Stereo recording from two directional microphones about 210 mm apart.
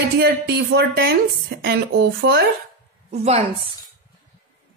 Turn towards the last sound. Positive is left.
turn(degrees=-25)  # may be behind; listen again after turning